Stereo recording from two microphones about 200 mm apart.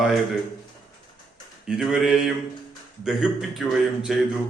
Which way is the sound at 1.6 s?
5° right (ahead or behind).